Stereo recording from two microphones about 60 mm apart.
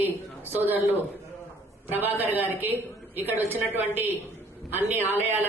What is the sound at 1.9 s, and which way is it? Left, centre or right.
A man's voice, right.